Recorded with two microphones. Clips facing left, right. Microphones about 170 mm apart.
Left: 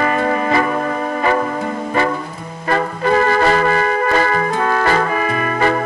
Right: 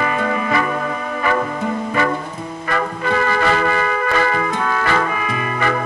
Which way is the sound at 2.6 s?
35° left (ahead or behind).